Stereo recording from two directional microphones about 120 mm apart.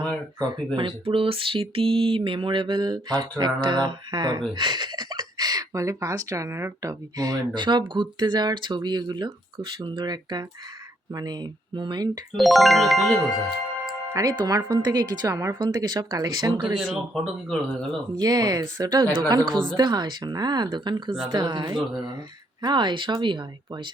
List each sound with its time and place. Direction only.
0.8 s a sound: 45° right (ahead or behind)
4.5 s speech: 35° right (ahead or behind)
12.4 s speech: centre (ahead or behind)
14.1 s speech: 30° right (ahead or behind)
16.7 s speech: 5° right (ahead or behind)
18.2 s speech: 30° right (ahead or behind)